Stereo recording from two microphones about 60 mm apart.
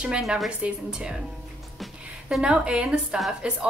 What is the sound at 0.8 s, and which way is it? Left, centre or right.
Speech, centre.